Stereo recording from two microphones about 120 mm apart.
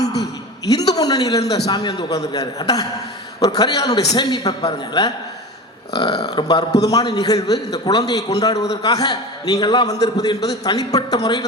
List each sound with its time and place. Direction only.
0.7 s a man's voice: 30° left (ahead or behind)